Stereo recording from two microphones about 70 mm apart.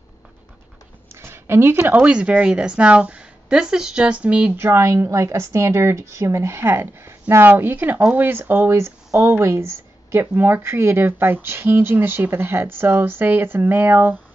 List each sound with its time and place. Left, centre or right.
1.1 s a sound: right
2.0 s speech: centre
4.6 s a woman's voice: right